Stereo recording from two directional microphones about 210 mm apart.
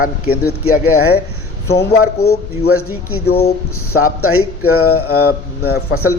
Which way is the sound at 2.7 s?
90° left.